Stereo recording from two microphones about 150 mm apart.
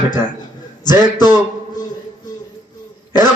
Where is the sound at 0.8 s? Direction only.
30° left (ahead or behind).